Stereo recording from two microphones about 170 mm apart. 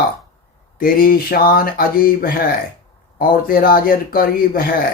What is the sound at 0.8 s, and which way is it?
Speech, 60° left (ahead or behind).